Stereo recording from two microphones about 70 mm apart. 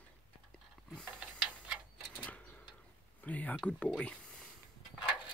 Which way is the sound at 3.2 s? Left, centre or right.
Left.